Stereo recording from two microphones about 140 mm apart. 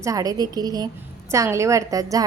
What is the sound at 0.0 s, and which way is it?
A woman's voice, 25° right (ahead or behind).